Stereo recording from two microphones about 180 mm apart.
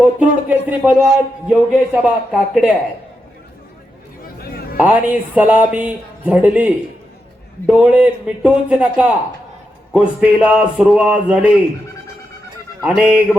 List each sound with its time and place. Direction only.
0.0 s speech: 10° right (ahead or behind)
4.2 s a sound: 55° left (ahead or behind)
4.8 s speech: 10° right (ahead or behind)
7.7 s speech: 5° right (ahead or behind)
12.8 s speech: 5° right (ahead or behind)